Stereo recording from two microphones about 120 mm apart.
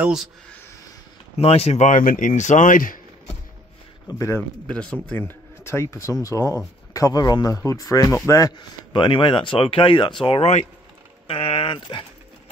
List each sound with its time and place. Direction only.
0.0 s speech: 5° right (ahead or behind)
1.3 s speech: 55° left (ahead or behind); by 2.8 s 90° left
4.1 s speech: 25° left (ahead or behind)
4.6 s speech: 10° left (ahead or behind); by 12.1 s 45° left (ahead or behind)